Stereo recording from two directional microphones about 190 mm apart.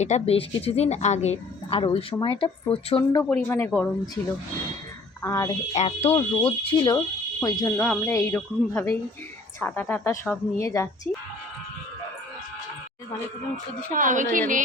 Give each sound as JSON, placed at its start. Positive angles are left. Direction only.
{"t": 0.0, "sound": "a woman's voice", "side_deg": 35}
{"t": 3.2, "sound": "a woman's voice", "side_deg": 10}
{"t": 5.2, "sound": "a woman's voice", "side_deg": 15}
{"t": 5.7, "sound": "a woman's voice", "side_deg": 35}
{"t": 6.9, "sound": "a woman's voice", "side_deg": 15}
{"t": 13.9, "sound": "a woman's voice", "side_deg": -45}